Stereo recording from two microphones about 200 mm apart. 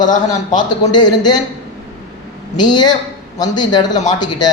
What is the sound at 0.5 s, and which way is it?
Speech, 20° left (ahead or behind).